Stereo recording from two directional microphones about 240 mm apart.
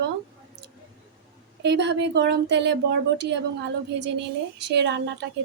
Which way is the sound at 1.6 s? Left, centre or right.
Right.